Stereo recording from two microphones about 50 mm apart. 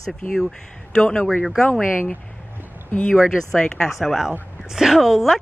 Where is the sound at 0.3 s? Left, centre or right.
Centre.